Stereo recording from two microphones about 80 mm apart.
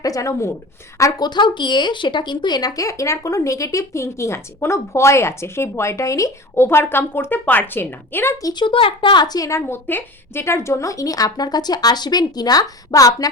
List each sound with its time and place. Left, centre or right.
0.0 s speech: left
1.2 s speech: left
8.5 s a woman's voice: left
9.6 s speech: left